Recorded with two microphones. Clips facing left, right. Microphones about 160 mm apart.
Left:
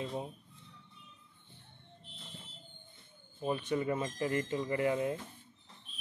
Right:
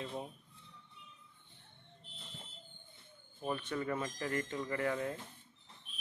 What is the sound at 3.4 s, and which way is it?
Speech, 15° left (ahead or behind).